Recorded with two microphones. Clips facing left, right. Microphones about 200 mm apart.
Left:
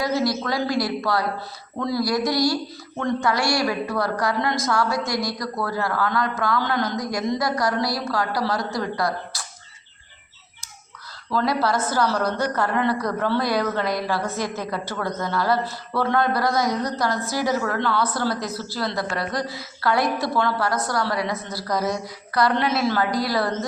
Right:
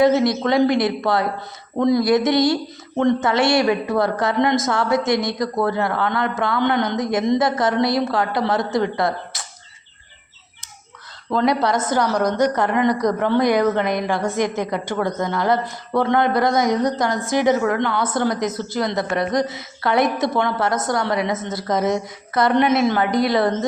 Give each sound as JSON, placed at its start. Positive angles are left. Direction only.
{"t": 0.0, "sound": "a woman's voice", "side_deg": -25}
{"t": 11.3, "sound": "a woman's voice", "side_deg": -20}